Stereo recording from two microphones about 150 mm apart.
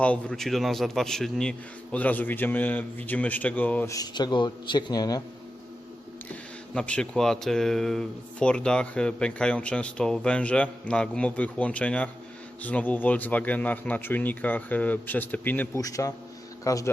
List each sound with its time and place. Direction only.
0.0 s speech: 5° left (ahead or behind)
3.9 s a man's voice: 25° left (ahead or behind)
6.7 s speech: 5° left (ahead or behind)
15.8 s a man's voice: 20° left (ahead or behind)